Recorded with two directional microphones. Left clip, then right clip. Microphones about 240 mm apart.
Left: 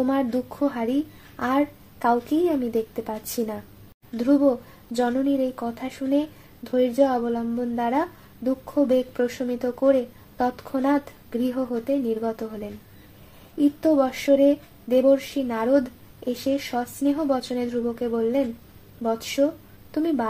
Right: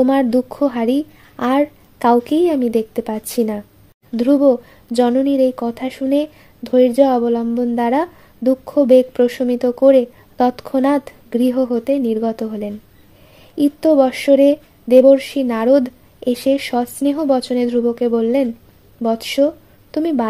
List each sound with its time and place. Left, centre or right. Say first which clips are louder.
0.0 s speech: right 9 dB; right
13.7 s speech: right 10 dB; right